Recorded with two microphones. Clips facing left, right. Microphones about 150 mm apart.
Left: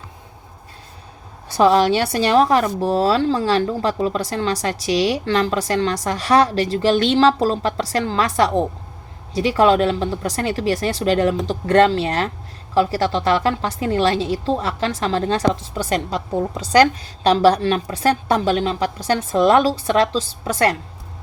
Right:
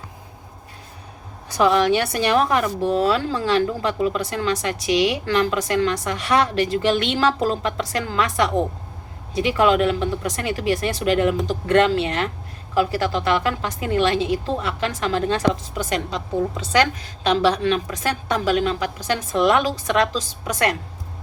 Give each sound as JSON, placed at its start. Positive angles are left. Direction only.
{"t": 1.5, "sound": "a woman's voice", "side_deg": 30}